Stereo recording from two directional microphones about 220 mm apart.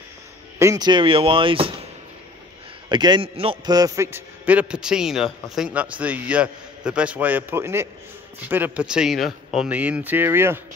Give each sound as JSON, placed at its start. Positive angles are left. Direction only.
{"t": 0.6, "sound": "speech", "side_deg": -15}
{"t": 2.9, "sound": "a man's voice", "side_deg": -20}